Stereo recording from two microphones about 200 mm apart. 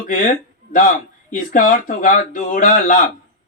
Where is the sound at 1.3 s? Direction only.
45° left (ahead or behind).